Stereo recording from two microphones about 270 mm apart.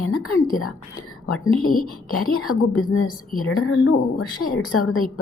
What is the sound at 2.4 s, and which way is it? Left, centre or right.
A woman's voice, left.